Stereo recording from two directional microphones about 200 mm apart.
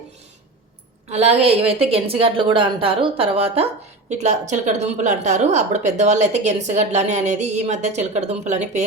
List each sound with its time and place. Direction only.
1.1 s a woman's voice: 30° right (ahead or behind)